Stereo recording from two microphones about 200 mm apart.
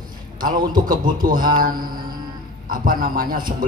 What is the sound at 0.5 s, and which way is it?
Speech, 20° right (ahead or behind).